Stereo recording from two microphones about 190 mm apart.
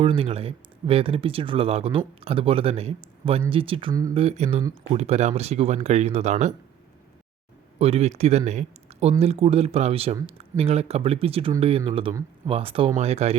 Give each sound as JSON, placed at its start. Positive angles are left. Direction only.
{"t": 0.0, "sound": "speech", "side_deg": -30}
{"t": 7.8, "sound": "speech", "side_deg": -35}